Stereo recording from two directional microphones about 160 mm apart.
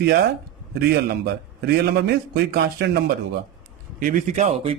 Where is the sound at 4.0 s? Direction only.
55° right (ahead or behind).